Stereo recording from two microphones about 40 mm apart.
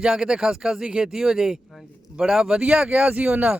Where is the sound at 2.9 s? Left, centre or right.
Right.